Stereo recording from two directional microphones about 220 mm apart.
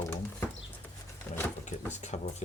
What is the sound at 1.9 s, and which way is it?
Speech, 30° left (ahead or behind).